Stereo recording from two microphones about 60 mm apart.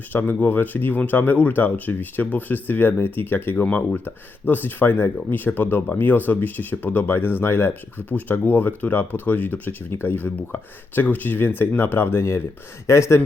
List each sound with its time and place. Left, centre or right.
0.1 s speech: left
12.9 s speech: left